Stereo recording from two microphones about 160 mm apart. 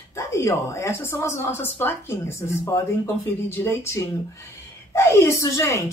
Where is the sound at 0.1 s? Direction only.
20° left (ahead or behind).